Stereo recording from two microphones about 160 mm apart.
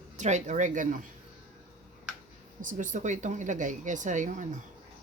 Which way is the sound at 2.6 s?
55° right (ahead or behind).